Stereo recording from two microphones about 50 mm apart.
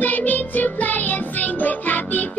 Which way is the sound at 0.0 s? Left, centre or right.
Left.